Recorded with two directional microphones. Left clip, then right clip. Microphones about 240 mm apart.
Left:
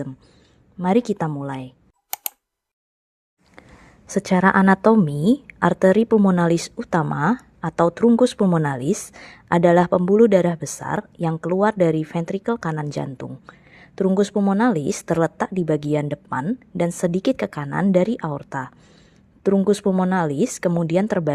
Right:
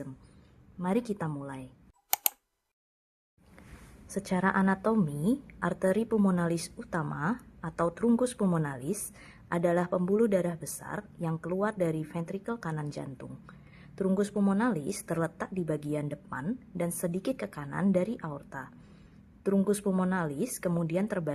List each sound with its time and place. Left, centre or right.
0.8 s a woman's voice: left
2.0 s a sound: centre
4.0 s a woman's voice: left